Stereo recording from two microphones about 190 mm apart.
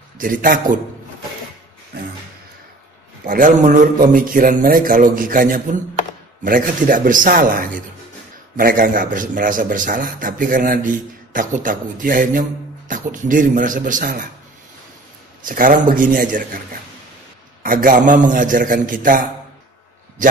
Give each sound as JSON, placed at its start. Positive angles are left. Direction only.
{"t": 0.2, "sound": "a man's voice", "side_deg": -45}
{"t": 3.3, "sound": "a man's voice", "side_deg": -45}
{"t": 15.4, "sound": "a man's voice", "side_deg": -45}
{"t": 17.6, "sound": "a man's voice", "side_deg": -45}